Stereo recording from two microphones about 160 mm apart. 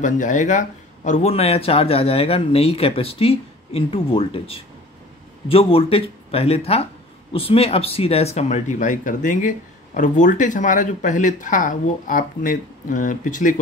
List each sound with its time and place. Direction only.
0.0 s speech: 50° left (ahead or behind)